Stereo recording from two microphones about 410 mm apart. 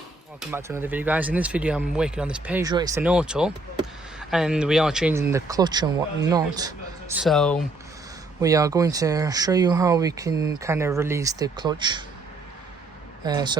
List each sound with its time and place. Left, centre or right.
0.3 s speech: centre
13.2 s speech: centre